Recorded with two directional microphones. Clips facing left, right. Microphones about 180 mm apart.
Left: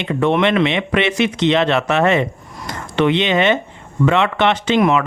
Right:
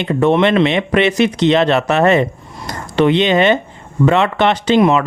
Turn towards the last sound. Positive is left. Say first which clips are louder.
# right 3 dB
turn(degrees=-35)  # may be behind; listen again after turning